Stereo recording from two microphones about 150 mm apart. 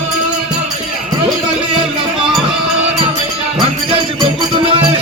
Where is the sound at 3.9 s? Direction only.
35° right (ahead or behind).